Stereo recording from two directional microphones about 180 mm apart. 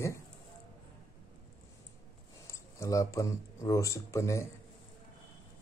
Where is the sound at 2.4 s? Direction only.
15° left (ahead or behind).